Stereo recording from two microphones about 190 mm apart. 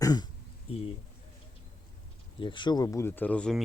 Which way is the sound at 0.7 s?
30° left (ahead or behind).